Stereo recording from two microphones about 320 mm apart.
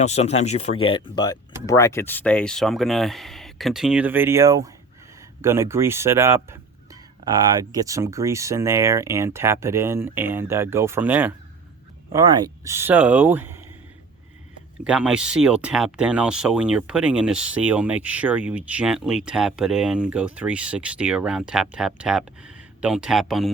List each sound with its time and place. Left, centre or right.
0.0 s speech: centre
14.8 s speech: centre